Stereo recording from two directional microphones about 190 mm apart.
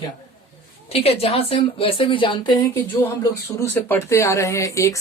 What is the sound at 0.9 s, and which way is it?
A woman's voice, 30° left (ahead or behind).